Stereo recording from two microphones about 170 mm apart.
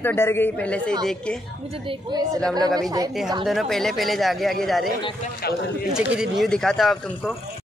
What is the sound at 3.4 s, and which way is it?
Speech, centre (ahead or behind).